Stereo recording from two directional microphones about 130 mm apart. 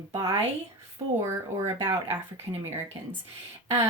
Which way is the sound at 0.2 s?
25° right (ahead or behind).